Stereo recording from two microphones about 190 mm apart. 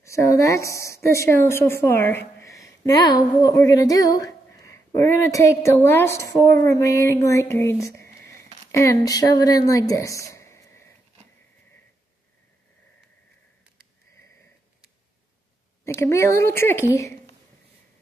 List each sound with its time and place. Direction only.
0.0 s a woman's voice: 15° left (ahead or behind)
16.0 s speech: 15° left (ahead or behind)